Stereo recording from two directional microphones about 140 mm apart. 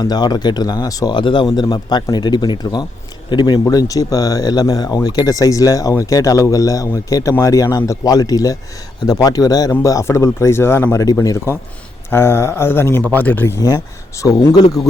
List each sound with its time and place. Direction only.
0.0 s speech: 30° left (ahead or behind); by 13.5 s 15° left (ahead or behind)
13.6 s speech: 25° left (ahead or behind)